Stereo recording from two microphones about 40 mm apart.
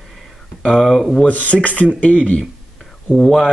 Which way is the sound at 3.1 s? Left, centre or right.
Centre.